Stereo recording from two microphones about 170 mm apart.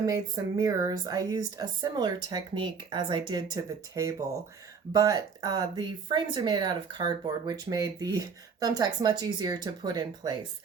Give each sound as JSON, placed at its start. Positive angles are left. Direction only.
{"t": 0.0, "sound": "speech", "side_deg": -20}